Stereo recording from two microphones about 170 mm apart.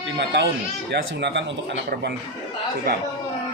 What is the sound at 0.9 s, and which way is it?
Speech, 90° right.